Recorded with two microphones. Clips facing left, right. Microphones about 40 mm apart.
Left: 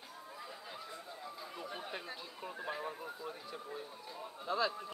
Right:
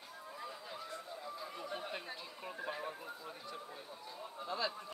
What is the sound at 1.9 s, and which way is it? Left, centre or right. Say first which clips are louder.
Chatter: left 1 dB; centre.